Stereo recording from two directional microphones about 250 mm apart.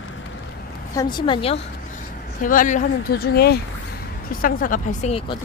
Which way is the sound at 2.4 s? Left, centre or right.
Left.